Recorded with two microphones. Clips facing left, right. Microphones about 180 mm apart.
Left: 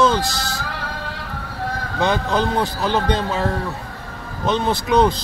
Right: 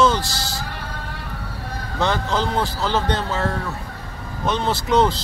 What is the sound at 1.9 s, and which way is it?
Speech, 15° left (ahead or behind).